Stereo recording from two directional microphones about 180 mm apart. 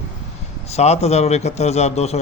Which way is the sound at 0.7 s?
35° left (ahead or behind).